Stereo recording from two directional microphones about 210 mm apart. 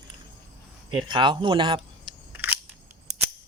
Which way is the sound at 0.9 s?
20° right (ahead or behind).